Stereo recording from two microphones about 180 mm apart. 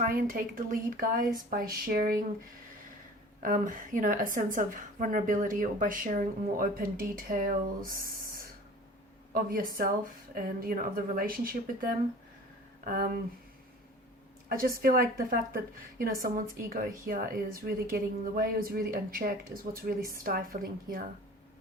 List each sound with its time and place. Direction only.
0.0 s a woman's voice: 50° right (ahead or behind)
3.4 s a woman's voice: 45° right (ahead or behind)
7.9 s a sound: 55° right (ahead or behind)
9.3 s a woman's voice: 50° right (ahead or behind)
14.5 s a woman's voice: 55° right (ahead or behind)